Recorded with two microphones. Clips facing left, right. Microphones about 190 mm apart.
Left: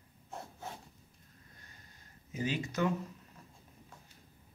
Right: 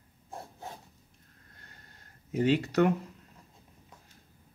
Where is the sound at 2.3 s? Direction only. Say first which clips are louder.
Right 9 dB; 65° right (ahead or behind).